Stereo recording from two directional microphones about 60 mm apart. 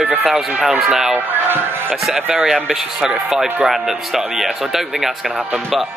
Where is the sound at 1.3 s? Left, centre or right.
Right.